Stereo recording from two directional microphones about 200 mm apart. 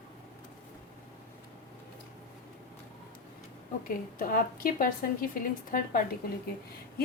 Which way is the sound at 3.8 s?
45° left (ahead or behind).